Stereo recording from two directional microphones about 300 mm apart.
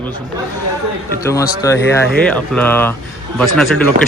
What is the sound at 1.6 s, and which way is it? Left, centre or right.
Speech, centre.